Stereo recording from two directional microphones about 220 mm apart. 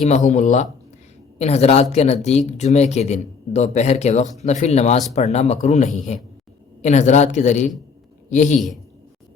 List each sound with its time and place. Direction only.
0.0 s speech: 30° left (ahead or behind)